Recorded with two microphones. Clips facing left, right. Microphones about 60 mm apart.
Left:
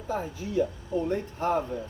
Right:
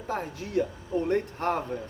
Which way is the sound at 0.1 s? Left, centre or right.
Right.